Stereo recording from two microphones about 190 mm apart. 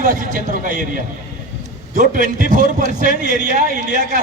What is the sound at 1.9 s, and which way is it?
A man's voice, 45° right (ahead or behind).